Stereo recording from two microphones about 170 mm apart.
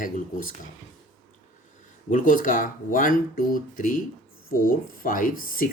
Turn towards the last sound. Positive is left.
turn(degrees=55)  # may be behind; listen again after turning